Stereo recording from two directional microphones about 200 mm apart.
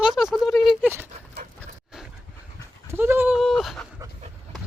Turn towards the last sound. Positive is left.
turn(degrees=0)  # may be behind; listen again after turning